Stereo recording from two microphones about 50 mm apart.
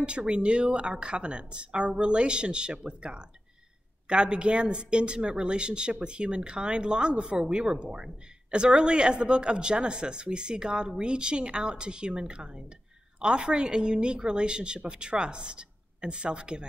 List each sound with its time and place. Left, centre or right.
0.0 s speech: centre